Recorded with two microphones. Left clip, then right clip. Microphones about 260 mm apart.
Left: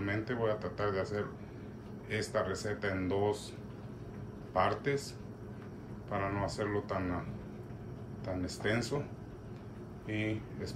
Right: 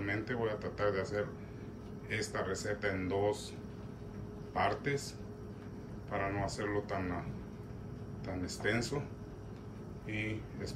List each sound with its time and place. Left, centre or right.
0.0 s speech: centre
4.6 s speech: centre
6.0 s speech: centre
8.3 s speech: centre
10.0 s speech: centre